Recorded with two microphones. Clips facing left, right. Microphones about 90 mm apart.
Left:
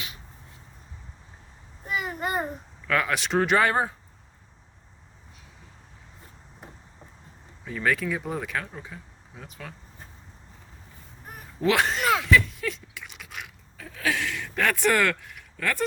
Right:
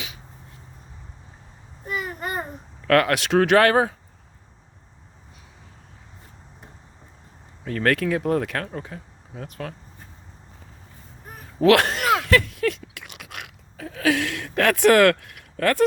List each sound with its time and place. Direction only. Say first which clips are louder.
1.9 s a sound: even; 10° left (ahead or behind)
2.8 s speech: right 7 dB; 70° right (ahead or behind); by 3.9 s 85° right
7.7 s speech: right 5 dB; 65° right (ahead or behind)
11.6 s speech: right 6 dB; 65° right (ahead or behind)
12.2 s a sound: right 2 dB; 65° right (ahead or behind)
14.1 s speech: right 6 dB; 70° right (ahead or behind)